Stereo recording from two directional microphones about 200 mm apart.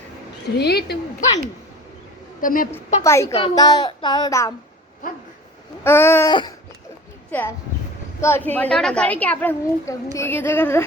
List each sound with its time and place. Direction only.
0.5 s a woman's voice: 55° left (ahead or behind)
2.4 s a woman's voice: 45° left (ahead or behind)
3.0 s a woman's voice: 15° left (ahead or behind)
5.8 s a woman's voice: 10° left (ahead or behind)